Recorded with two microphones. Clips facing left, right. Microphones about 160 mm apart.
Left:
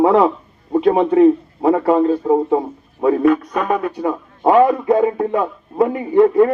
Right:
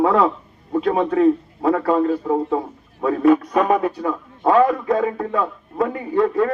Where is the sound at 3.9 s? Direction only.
20° left (ahead or behind).